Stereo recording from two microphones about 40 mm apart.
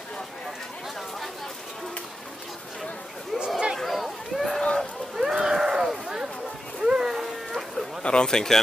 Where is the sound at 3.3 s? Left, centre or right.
Right.